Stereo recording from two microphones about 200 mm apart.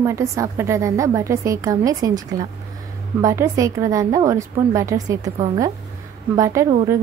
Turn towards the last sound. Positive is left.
turn(degrees=-15)  # may be behind; listen again after turning